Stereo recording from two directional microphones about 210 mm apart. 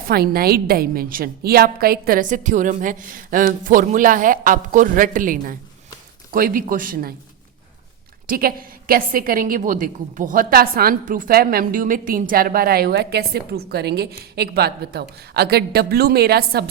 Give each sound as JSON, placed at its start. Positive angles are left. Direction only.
{"t": 0.1, "sound": "a woman's voice", "side_deg": -45}
{"t": 8.3, "sound": "a woman's voice", "side_deg": -45}